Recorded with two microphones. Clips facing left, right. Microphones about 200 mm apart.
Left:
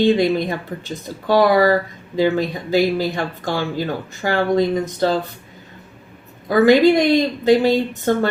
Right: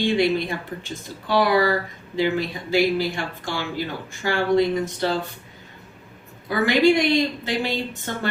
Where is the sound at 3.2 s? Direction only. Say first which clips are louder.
Left 6 dB; 45° left (ahead or behind).